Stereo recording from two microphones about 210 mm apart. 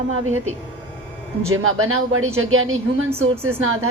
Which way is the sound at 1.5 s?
85° right.